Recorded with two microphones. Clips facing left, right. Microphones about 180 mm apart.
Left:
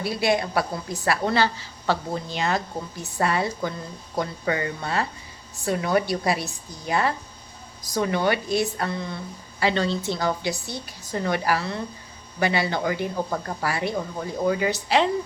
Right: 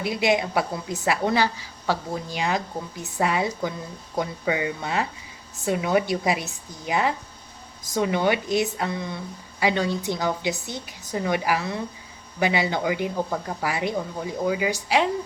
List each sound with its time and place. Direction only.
0.0 s a woman's voice: 15° right (ahead or behind)
14.2 s speech: 5° right (ahead or behind)